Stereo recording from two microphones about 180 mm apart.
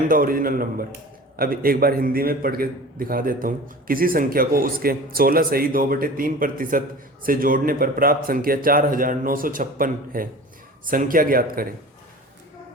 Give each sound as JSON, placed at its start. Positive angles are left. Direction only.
{"t": 0.1, "sound": "a man's voice", "side_deg": -50}